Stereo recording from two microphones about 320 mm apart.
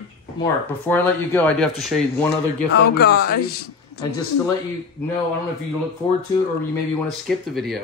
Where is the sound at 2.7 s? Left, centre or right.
Left.